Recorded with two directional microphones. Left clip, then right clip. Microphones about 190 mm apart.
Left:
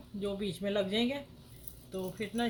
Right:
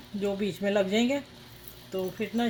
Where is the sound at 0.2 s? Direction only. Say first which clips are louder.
Right 6 dB; 40° right (ahead or behind).